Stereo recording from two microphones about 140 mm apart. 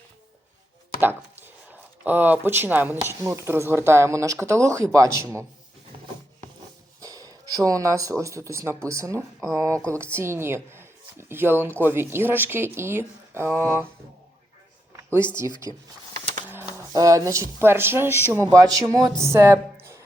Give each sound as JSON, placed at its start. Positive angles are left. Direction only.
{"t": 2.0, "sound": "speech", "side_deg": -15}
{"t": 7.0, "sound": "a woman's voice", "side_deg": -25}
{"t": 15.7, "sound": "speech", "side_deg": 30}
{"t": 16.1, "sound": "printer", "side_deg": -55}
{"t": 16.5, "sound": "a sound", "side_deg": -15}
{"t": 16.9, "sound": "a woman's voice", "side_deg": -25}